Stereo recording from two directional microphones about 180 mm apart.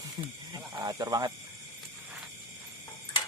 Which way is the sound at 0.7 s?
20° right (ahead or behind).